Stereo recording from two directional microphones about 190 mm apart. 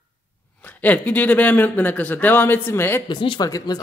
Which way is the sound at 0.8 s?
10° left (ahead or behind).